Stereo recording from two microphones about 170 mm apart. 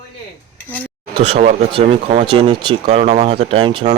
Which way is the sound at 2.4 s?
30° right (ahead or behind).